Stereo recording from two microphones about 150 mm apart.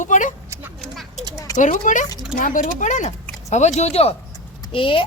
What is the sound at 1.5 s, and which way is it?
A woman's voice, 55° left (ahead or behind).